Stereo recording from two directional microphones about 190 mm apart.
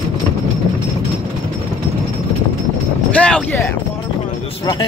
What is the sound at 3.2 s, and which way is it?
Speech, 5° left (ahead or behind).